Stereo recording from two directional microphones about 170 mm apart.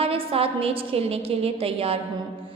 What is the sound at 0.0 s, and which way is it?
A woman's voice, 35° right (ahead or behind).